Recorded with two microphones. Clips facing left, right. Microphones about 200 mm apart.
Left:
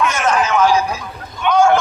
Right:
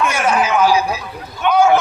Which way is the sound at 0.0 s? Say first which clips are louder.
Even; 10° right (ahead or behind).